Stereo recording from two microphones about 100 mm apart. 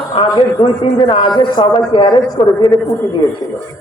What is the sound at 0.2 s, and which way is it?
A man's voice, 50° left (ahead or behind).